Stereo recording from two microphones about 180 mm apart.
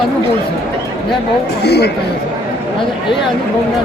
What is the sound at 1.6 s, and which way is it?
Speech, 65° left (ahead or behind).